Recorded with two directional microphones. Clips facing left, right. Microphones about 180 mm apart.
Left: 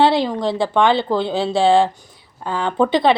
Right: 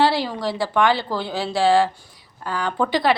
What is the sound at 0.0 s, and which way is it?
A woman's voice, 20° left (ahead or behind).